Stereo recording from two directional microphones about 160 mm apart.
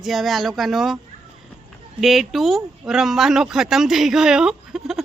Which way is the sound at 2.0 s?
Centre (ahead or behind).